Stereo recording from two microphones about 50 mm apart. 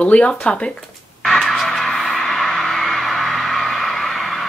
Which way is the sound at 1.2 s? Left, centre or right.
Centre.